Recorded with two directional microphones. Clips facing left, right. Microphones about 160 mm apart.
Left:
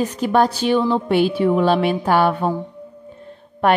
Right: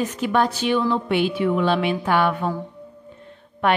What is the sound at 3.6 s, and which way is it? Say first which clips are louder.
Speech: left 4 dB; 40° left (ahead or behind).